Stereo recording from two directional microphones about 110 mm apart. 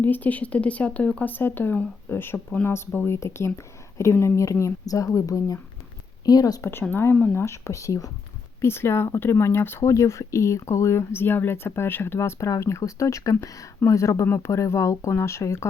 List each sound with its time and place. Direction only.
0.0 s a woman's voice: 15° left (ahead or behind); by 6.7 s 35° left (ahead or behind)
6.9 s speech: 20° left (ahead or behind)